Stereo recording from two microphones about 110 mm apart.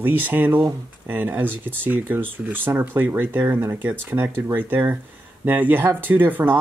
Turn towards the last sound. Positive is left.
turn(degrees=-15)  # may be behind; listen again after turning